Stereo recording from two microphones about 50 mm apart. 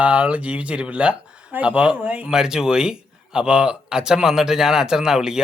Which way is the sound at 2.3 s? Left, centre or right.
Centre.